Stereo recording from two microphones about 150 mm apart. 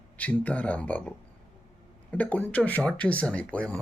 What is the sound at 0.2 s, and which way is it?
Speech, 10° left (ahead or behind).